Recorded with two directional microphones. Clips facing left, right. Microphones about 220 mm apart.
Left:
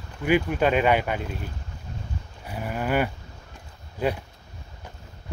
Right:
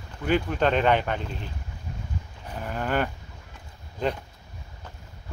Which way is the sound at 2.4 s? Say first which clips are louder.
Left 2 dB; 10° left (ahead or behind).